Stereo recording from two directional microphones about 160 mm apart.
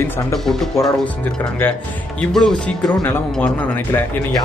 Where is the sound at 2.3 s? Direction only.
5° left (ahead or behind).